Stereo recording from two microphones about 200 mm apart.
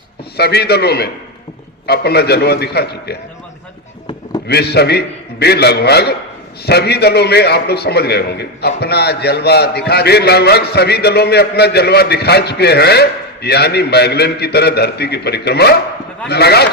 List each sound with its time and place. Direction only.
0.3 s a man's voice: 55° left (ahead or behind)
4.4 s a man's voice: 55° left (ahead or behind)